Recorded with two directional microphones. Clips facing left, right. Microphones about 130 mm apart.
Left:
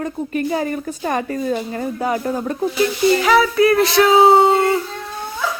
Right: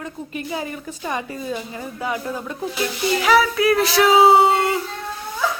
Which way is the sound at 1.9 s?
40° left (ahead or behind).